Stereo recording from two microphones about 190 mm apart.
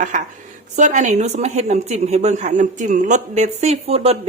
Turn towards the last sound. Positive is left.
turn(degrees=-35)  # may be behind; listen again after turning